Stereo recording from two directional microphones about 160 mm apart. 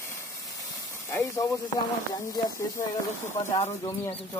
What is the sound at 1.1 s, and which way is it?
Speech, 20° left (ahead or behind).